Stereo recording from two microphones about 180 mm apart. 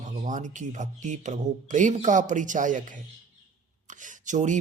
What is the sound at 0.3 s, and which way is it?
Speech, 45° right (ahead or behind).